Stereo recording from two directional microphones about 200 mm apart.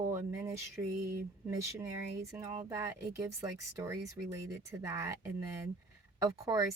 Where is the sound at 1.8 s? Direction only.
15° right (ahead or behind).